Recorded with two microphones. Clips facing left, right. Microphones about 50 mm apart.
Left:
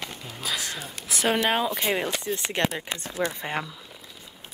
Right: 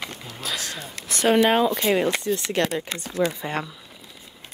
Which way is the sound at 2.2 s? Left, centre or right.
Centre.